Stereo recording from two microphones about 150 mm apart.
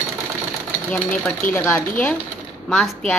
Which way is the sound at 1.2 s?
10° left (ahead or behind).